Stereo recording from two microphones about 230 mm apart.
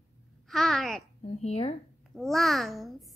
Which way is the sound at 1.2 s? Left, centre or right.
Left.